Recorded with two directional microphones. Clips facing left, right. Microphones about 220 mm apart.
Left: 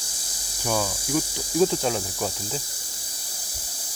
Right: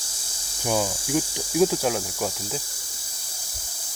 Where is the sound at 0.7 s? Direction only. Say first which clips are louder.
Right 1 dB; 15° right (ahead or behind).